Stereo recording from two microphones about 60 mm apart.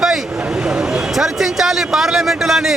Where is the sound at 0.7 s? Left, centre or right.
Centre.